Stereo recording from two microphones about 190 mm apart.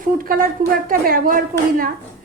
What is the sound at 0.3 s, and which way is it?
A woman's voice, 50° right (ahead or behind).